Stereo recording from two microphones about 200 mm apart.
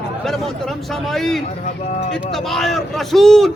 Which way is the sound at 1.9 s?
35° left (ahead or behind).